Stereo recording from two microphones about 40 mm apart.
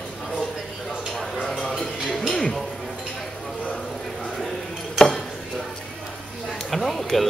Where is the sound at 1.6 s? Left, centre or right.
Centre.